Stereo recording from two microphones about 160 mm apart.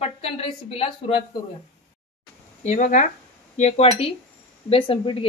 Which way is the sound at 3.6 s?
40° left (ahead or behind).